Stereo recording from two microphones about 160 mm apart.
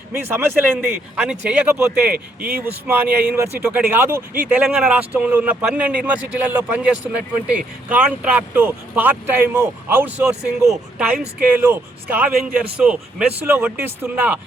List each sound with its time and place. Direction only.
0.3 s speech: 15° right (ahead or behind)